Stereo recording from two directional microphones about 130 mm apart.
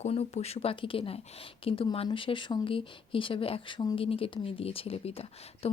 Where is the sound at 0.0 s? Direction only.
55° left (ahead or behind).